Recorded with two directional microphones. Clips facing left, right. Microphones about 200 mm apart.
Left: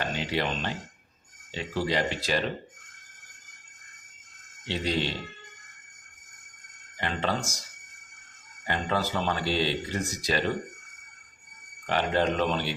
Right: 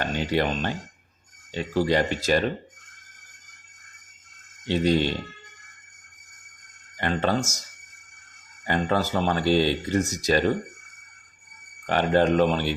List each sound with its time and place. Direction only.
0.0 s a sound: 45° right (ahead or behind)
1.5 s speech: 50° right (ahead or behind)
4.6 s speech: 50° right (ahead or behind)
7.0 s speech: 45° right (ahead or behind)
8.6 s speech: 50° right (ahead or behind)
11.9 s speech: 45° right (ahead or behind)